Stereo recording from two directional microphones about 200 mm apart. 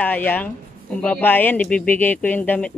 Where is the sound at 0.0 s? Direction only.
10° left (ahead or behind).